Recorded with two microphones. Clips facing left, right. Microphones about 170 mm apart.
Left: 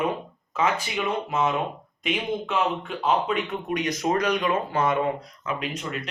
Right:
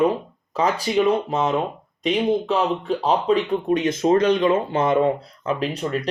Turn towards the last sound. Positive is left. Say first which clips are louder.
# right 7 dB
turn(degrees=-35)  # may be behind; listen again after turning